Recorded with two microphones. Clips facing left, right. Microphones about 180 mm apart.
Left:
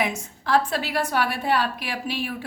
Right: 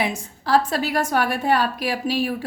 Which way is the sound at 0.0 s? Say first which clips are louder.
Right 1 dB; 35° right (ahead or behind).